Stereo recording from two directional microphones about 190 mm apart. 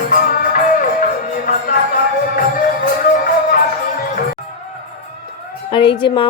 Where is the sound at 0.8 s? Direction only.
45° left (ahead or behind).